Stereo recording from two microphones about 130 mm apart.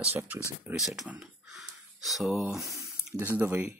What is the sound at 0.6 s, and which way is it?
Speech, 5° right (ahead or behind).